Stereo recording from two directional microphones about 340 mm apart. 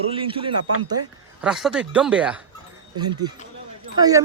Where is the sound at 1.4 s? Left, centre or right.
Centre.